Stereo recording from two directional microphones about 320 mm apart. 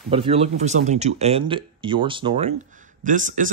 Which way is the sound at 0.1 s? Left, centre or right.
Centre.